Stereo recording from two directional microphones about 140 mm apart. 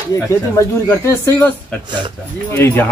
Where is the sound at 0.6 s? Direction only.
20° left (ahead or behind).